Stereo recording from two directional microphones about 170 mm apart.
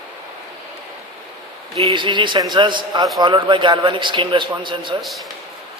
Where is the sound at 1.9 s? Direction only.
30° right (ahead or behind).